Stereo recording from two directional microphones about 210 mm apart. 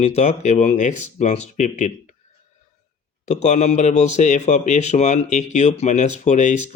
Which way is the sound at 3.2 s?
30° left (ahead or behind).